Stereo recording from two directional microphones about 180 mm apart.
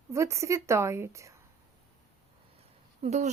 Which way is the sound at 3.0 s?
40° right (ahead or behind).